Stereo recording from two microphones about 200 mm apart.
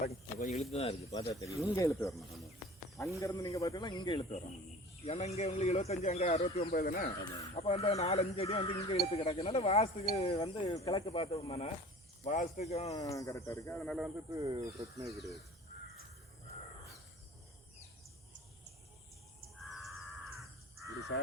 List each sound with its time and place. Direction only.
0.0 s speech: 35° left (ahead or behind)
1.1 s speech: 20° left (ahead or behind)
6.7 s speech: 45° left (ahead or behind)
7.5 s speech: 30° left (ahead or behind)
11.0 s speech: 30° left (ahead or behind)
12.9 s speech: 15° left (ahead or behind); by 14.1 s centre (ahead or behind)
14.3 s speech: 20° right (ahead or behind)
19.8 s crow: centre (ahead or behind)